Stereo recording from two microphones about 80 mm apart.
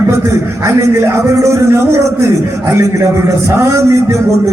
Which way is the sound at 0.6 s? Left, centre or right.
Right.